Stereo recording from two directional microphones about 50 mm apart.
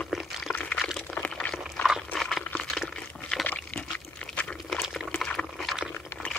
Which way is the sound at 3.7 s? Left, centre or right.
Left.